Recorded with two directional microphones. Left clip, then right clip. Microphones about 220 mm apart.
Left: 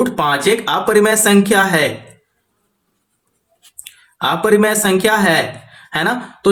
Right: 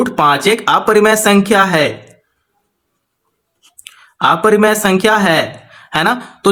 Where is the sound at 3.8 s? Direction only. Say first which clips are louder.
Right 6 dB; 30° right (ahead or behind).